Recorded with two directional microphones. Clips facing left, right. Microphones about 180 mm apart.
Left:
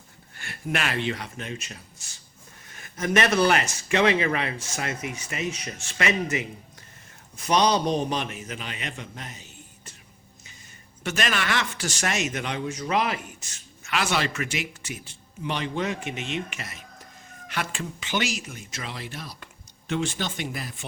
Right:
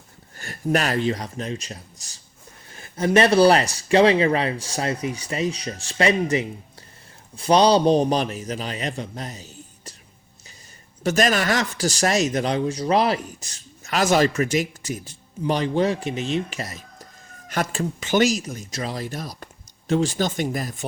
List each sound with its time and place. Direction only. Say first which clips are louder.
0.3 s speech: right 7 dB; 40° right (ahead or behind)
11.0 s speech: right 7 dB; 40° right (ahead or behind)